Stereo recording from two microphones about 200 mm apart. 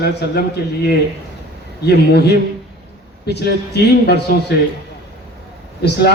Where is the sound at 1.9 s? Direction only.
55° left (ahead or behind).